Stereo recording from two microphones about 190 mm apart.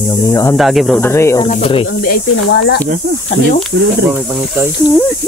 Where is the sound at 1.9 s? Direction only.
55° left (ahead or behind).